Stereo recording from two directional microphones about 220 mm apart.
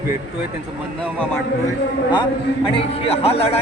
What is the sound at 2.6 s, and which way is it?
Speech, 25° left (ahead or behind).